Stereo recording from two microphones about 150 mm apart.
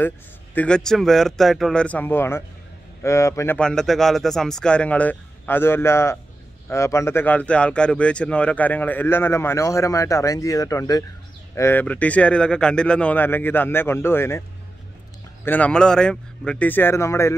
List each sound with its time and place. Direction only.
0.6 s a man's voice: 5° left (ahead or behind)
3.5 s speech: 5° left (ahead or behind)
15.4 s speech: 10° left (ahead or behind)